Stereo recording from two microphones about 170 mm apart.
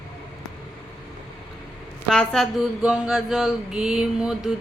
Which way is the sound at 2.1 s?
5° left (ahead or behind).